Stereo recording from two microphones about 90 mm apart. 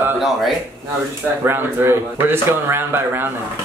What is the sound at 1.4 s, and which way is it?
Speech, 25° right (ahead or behind).